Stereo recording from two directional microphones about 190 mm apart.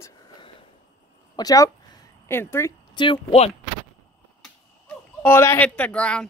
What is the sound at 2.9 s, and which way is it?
Speech, 25° left (ahead or behind).